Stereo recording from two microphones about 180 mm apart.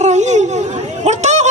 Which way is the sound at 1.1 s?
40° right (ahead or behind).